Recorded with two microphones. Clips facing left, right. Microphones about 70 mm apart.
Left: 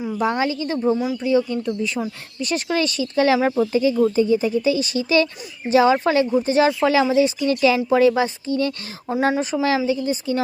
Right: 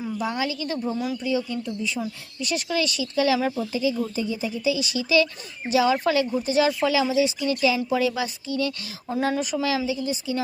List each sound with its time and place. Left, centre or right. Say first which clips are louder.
0.2 s speech: left 7 dB; left
1.2 s speech: left 7 dB; left
7.9 s speech: left 8 dB; left